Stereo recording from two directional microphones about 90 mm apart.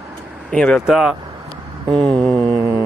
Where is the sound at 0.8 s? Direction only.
5° right (ahead or behind).